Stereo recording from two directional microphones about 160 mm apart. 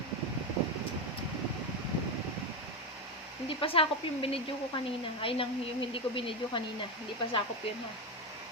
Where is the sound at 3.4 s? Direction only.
35° left (ahead or behind).